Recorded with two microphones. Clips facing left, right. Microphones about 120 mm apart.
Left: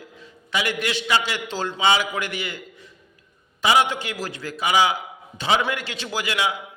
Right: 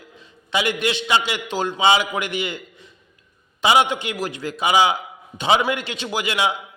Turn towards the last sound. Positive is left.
turn(degrees=-25)  # may be behind; listen again after turning